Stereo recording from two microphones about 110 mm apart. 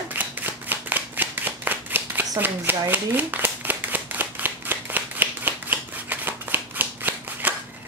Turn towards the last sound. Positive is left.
turn(degrees=-15)  # may be behind; listen again after turning